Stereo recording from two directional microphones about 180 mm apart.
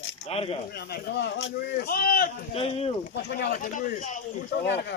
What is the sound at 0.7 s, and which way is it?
Speech, 60° left (ahead or behind).